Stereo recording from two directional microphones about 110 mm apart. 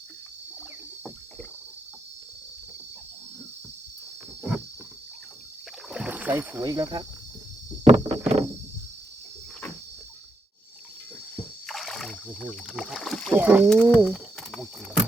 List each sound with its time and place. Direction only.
5.9 s rowboat: 10° right (ahead or behind)
6.6 s cricket: 30° right (ahead or behind)
7.9 s vehicle: 70° right (ahead or behind)
11.6 s a sound: centre (ahead or behind)
12.3 s speech: 10° right (ahead or behind)
13.3 s speech: 15° right (ahead or behind)
13.7 s speech: 10° left (ahead or behind)
14.1 s speech: 5° right (ahead or behind)